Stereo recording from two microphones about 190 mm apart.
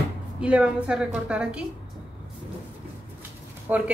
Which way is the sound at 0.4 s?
5° right (ahead or behind).